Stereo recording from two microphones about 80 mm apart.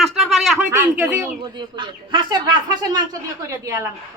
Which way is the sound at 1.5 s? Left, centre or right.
Right.